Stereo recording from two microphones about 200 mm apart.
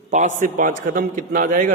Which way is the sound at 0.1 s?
40° right (ahead or behind).